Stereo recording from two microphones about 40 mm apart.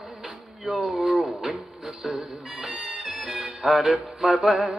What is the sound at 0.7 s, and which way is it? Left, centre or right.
Music, centre.